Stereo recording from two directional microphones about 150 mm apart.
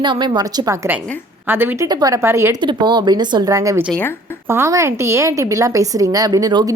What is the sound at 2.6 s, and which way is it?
A woman's voice, 30° right (ahead or behind).